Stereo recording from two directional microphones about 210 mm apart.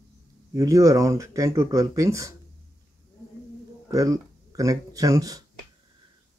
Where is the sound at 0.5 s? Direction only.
15° right (ahead or behind).